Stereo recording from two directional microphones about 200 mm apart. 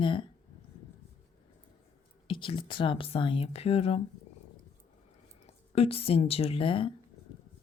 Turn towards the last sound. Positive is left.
turn(degrees=25)  # may be behind; listen again after turning